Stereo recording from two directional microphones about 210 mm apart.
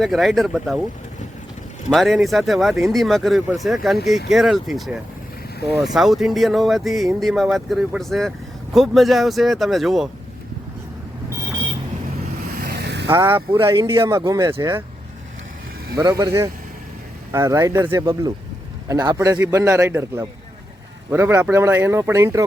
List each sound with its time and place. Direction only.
0.0 s speech: centre (ahead or behind)
1.9 s speech: centre (ahead or behind)
5.8 s speech: centre (ahead or behind)
12.5 s vehicle: 45° right (ahead or behind)
13.1 s speech: 15° right (ahead or behind)
16.0 s speech: 15° right (ahead or behind)